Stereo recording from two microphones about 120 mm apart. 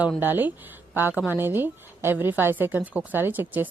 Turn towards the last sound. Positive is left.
turn(degrees=-15)  # may be behind; listen again after turning